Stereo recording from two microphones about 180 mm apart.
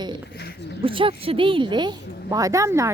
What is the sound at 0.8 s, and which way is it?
A woman's voice, 30° right (ahead or behind).